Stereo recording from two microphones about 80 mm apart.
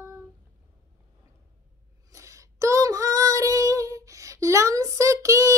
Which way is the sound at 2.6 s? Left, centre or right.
Right.